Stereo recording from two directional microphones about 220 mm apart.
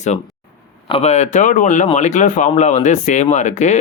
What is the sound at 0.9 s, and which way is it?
Speech, 25° left (ahead or behind).